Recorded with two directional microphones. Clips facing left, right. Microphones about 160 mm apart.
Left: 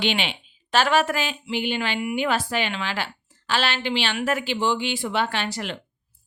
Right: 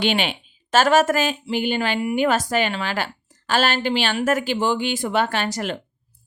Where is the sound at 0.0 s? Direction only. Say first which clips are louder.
Right 4 dB; 45° right (ahead or behind).